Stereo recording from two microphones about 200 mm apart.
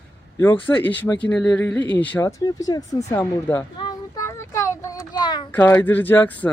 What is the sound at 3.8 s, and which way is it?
Child singing, 20° left (ahead or behind).